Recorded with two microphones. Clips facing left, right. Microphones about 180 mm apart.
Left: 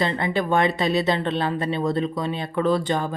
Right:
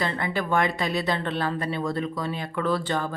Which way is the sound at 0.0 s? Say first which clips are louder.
Left 4 dB; 20° left (ahead or behind).